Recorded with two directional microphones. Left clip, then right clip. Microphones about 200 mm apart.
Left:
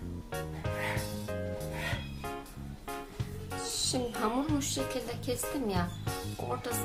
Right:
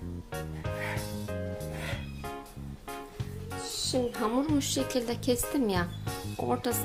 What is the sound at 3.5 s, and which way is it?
Music, centre (ahead or behind).